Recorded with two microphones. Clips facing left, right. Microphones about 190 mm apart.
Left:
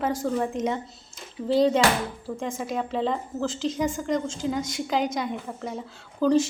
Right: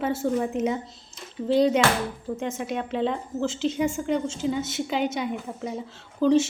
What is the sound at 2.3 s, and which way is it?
A woman's voice, 5° right (ahead or behind).